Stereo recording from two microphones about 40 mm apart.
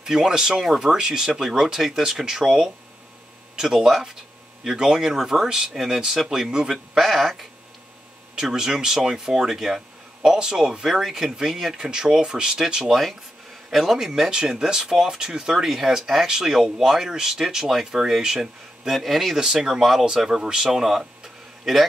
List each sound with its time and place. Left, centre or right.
0.0 s speech: centre
7.0 s speech: centre
8.4 s speech: centre
11.0 s speech: centre
13.7 s speech: centre
18.9 s speech: centre